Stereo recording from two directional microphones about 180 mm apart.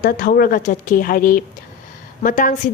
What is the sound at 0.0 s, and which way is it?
A woman's voice, 55° left (ahead or behind).